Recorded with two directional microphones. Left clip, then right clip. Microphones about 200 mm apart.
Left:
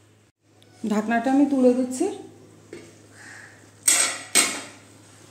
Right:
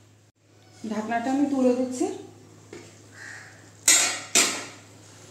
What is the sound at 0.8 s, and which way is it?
Speech, 60° left (ahead or behind).